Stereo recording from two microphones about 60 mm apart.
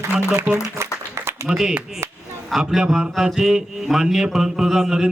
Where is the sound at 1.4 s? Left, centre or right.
Centre.